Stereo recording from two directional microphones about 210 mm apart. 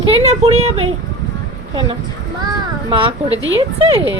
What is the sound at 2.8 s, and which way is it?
A child's voice, 25° right (ahead or behind).